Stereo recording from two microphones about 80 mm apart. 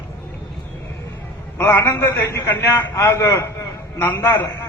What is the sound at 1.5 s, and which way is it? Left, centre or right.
A man's voice, left.